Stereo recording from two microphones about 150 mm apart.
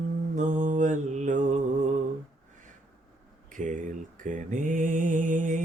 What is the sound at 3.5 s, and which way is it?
Mantra, 60° right (ahead or behind).